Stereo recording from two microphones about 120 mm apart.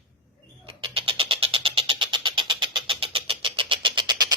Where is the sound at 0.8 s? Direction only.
50° right (ahead or behind).